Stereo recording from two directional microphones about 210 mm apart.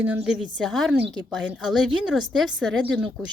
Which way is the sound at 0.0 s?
5° right (ahead or behind).